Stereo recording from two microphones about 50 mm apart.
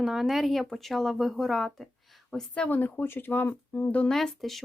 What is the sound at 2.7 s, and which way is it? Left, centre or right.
Speech, left.